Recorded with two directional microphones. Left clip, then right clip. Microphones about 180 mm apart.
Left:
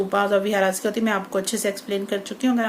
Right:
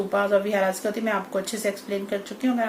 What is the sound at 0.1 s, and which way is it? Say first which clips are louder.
Speech: even; 50° left (ahead or behind).